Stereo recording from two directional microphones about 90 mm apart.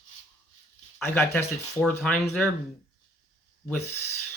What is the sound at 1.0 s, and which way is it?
Speech, 25° left (ahead or behind).